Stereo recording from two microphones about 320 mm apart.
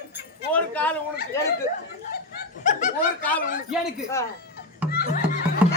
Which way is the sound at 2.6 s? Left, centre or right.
Left.